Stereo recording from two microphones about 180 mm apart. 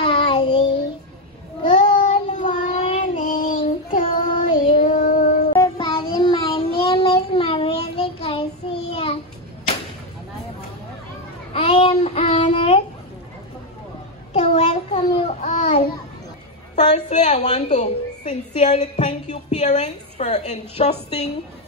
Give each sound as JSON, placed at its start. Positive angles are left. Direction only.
{"t": 0.0, "sound": "child singing", "side_deg": 30}
{"t": 2.0, "sound": "child singing", "side_deg": 40}
{"t": 3.3, "sound": "child singing", "side_deg": 50}
{"t": 5.5, "sound": "child singing", "side_deg": 25}
{"t": 11.5, "sound": "child singing", "side_deg": 30}
{"t": 14.3, "sound": "a sound", "side_deg": 35}
{"t": 16.7, "sound": "a sound", "side_deg": 40}
{"t": 17.7, "sound": "music", "side_deg": 40}